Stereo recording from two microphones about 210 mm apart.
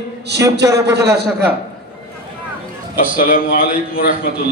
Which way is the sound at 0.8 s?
50° right (ahead or behind).